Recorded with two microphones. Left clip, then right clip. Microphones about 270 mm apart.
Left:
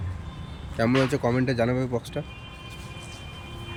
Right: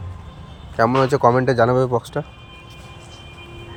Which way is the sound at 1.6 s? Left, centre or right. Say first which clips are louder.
Right 10 dB; right.